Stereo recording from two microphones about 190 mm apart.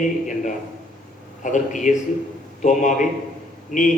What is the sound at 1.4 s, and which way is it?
A man's voice, 40° left (ahead or behind).